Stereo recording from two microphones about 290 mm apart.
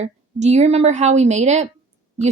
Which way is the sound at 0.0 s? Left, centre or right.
Right.